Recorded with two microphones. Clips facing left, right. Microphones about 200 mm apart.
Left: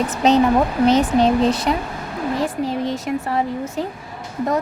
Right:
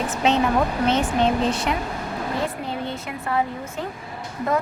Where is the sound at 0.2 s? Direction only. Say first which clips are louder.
Left 5 dB; 40° left (ahead or behind).